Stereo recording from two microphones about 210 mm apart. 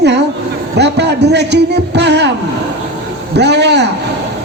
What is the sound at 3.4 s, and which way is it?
Speech, 55° right (ahead or behind).